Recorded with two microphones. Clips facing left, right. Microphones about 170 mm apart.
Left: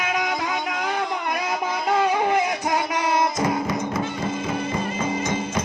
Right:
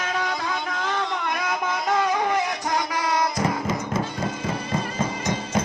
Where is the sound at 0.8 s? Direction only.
10° left (ahead or behind).